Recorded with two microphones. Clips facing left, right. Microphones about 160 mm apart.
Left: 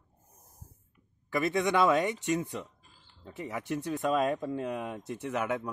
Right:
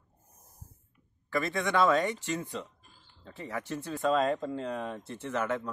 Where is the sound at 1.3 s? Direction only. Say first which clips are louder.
Left 2 dB; 20° left (ahead or behind).